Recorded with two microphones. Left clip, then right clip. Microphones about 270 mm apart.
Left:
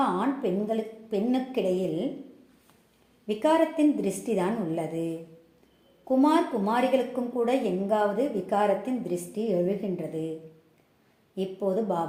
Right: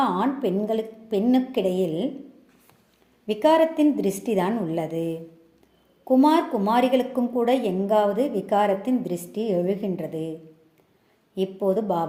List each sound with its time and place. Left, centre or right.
0.0 s a woman's voice: right
3.2 s a woman's voice: right
11.3 s a woman's voice: right